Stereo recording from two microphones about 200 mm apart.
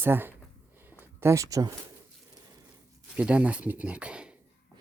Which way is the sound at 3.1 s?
5° right (ahead or behind).